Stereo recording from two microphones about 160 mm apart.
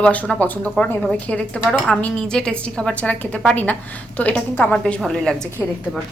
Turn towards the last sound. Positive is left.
turn(degrees=5)  # may be behind; listen again after turning